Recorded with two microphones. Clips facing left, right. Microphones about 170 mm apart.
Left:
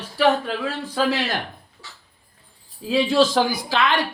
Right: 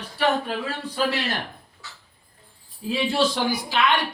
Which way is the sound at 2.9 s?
90° left.